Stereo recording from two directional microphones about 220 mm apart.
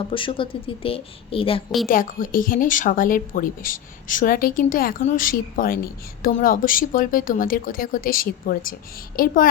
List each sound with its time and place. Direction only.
0.1 s speech: 25° left (ahead or behind)
1.9 s a woman's voice: 40° left (ahead or behind)